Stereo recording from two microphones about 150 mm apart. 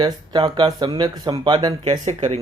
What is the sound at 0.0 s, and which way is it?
Speech, 30° right (ahead or behind).